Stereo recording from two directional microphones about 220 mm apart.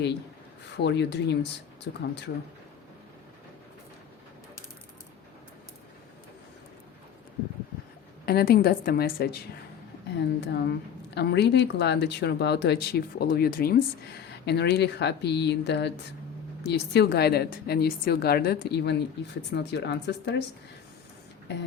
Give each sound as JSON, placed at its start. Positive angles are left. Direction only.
{"t": 0.8, "sound": "a woman's voice", "side_deg": 50}
{"t": 8.3, "sound": "a woman's voice", "side_deg": 45}